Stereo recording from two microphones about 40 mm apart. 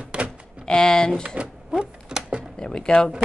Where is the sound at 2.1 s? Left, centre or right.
Right.